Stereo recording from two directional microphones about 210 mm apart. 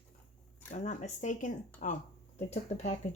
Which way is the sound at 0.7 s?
35° left (ahead or behind).